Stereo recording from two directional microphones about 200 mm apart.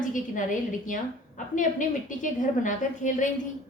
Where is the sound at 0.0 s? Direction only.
40° left (ahead or behind).